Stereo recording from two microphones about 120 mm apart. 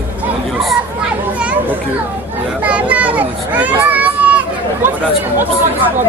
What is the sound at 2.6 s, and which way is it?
A child's voice, 10° right (ahead or behind).